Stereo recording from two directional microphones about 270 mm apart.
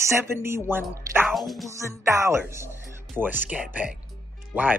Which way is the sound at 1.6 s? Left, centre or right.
Centre.